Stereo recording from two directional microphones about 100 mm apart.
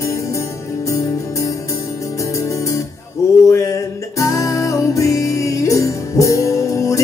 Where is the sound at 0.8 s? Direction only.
30° left (ahead or behind).